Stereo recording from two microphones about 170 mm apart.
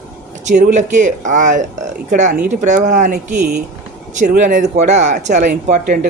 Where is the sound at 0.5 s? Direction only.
50° right (ahead or behind).